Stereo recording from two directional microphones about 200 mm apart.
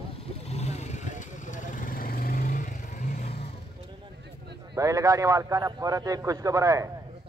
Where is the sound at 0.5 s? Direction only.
35° left (ahead or behind).